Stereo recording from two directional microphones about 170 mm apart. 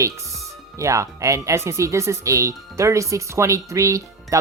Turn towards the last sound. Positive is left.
turn(degrees=-20)  # may be behind; listen again after turning